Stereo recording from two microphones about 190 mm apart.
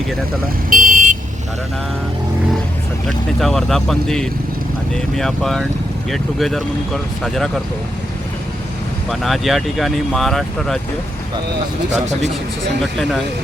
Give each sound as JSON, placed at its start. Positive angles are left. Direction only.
{"t": 0.7, "sound": "vehicle", "side_deg": -45}
{"t": 3.4, "sound": "speech", "side_deg": 0}
{"t": 9.0, "sound": "speech", "side_deg": 0}
{"t": 12.8, "sound": "speech", "side_deg": 0}